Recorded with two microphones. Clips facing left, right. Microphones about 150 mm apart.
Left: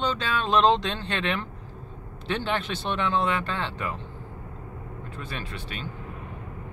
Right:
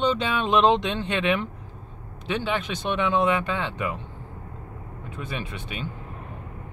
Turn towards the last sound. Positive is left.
turn(degrees=-15)  # may be behind; listen again after turning